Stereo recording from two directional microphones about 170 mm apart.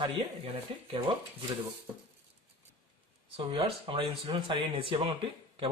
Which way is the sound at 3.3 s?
35° right (ahead or behind).